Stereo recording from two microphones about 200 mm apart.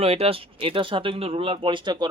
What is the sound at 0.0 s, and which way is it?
Speech, 30° right (ahead or behind).